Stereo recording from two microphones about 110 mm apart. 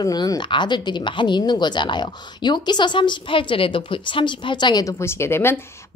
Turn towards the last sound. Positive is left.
turn(degrees=20)  # may be behind; listen again after turning